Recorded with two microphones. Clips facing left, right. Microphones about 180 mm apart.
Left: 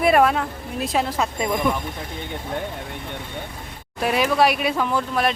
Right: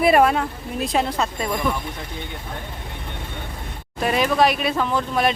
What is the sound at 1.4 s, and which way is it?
Speech, 15° left (ahead or behind).